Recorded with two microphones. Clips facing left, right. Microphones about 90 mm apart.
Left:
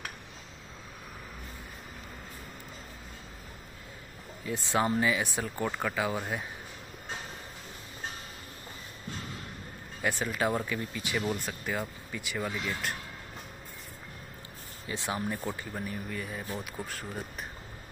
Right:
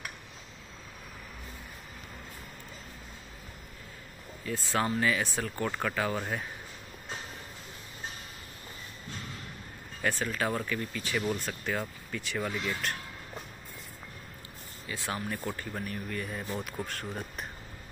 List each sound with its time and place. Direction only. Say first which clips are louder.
4.5 s speech: left 2 dB; 20° left (ahead or behind)
10.0 s speech: left 1 dB; 15° left (ahead or behind)
14.9 s speech: left 2 dB; 20° left (ahead or behind); by 17.5 s centre (ahead or behind)